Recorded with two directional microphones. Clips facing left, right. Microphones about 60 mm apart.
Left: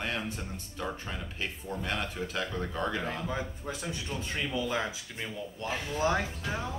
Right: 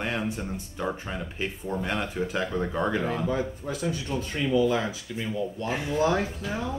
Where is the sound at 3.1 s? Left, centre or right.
Centre.